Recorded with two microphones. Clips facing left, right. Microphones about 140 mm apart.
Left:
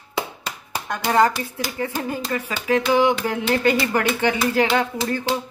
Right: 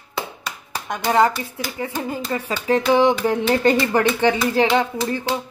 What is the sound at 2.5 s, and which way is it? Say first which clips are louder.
Speech: right 2 dB; 35° right (ahead or behind).